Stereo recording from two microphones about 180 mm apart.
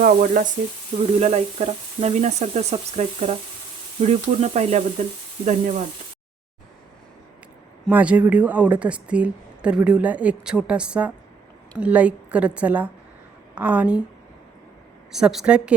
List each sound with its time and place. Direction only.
0.0 s speech: 45° right (ahead or behind)
0.9 s frying: 35° right (ahead or behind)
7.9 s speech: 10° right (ahead or behind)
15.1 s a woman's voice: centre (ahead or behind)